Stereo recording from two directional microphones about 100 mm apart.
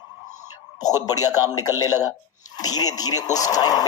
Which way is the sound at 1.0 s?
40° left (ahead or behind).